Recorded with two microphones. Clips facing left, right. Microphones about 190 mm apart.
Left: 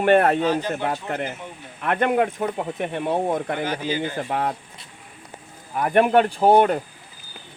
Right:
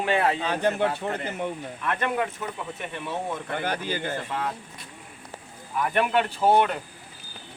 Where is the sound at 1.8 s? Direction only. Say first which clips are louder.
Left 7 dB; 55° left (ahead or behind).